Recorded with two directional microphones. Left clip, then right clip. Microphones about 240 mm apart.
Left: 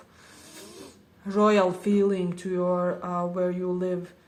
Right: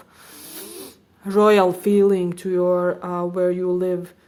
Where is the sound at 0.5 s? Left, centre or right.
Right.